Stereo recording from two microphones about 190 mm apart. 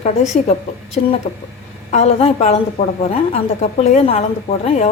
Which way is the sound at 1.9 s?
35° left (ahead or behind).